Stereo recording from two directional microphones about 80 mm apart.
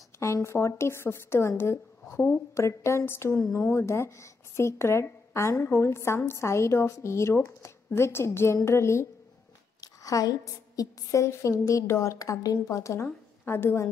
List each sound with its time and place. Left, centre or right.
0.2 s a woman's voice: left
9.8 s a woman's voice: left